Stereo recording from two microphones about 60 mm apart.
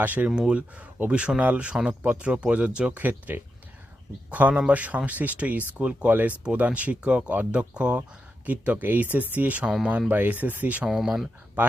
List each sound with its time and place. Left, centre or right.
0.0 s speech: right
0.3 s speech: centre
1.7 s speech: centre
3.0 s speech: right
10.8 s speech: centre
11.6 s speech: right